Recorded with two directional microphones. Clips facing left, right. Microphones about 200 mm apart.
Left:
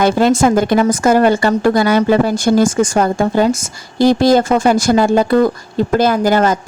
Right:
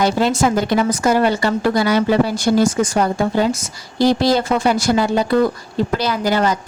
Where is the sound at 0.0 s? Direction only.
50° left (ahead or behind).